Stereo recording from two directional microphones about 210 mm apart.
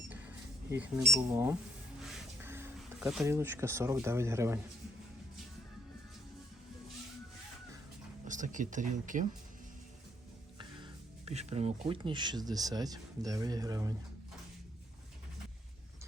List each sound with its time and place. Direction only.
0.1 s cash register: 10° right (ahead or behind)
2.0 s a sound: 10° right (ahead or behind)
3.2 s speech: 10° right (ahead or behind)
8.3 s speech: 35° right (ahead or behind)
11.3 s speech: 30° right (ahead or behind)